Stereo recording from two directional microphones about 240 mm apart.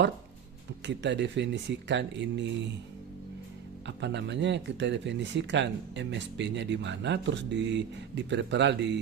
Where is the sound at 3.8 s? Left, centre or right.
Right.